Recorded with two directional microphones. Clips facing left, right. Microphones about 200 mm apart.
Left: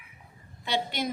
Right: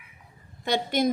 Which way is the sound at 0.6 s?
50° right (ahead or behind).